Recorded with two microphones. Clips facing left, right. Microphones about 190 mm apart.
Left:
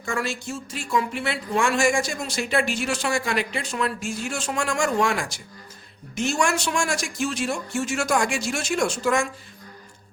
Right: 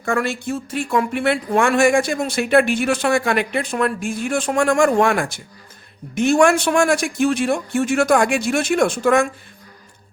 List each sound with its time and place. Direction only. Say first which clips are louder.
0.0 s speech: right 7 dB; 60° right (ahead or behind)